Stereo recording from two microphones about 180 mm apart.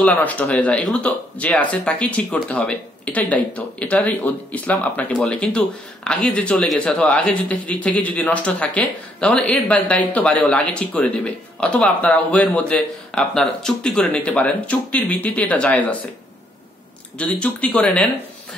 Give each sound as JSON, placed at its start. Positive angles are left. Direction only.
{"t": 0.0, "sound": "speech", "side_deg": 10}
{"t": 17.2, "sound": "speech", "side_deg": 5}